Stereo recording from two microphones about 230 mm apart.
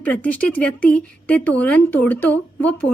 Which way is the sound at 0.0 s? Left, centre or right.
Centre.